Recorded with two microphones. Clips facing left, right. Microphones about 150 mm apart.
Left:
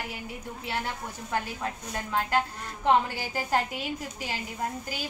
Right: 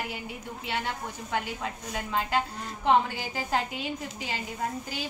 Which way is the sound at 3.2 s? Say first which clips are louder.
Left 2 dB; 5° left (ahead or behind).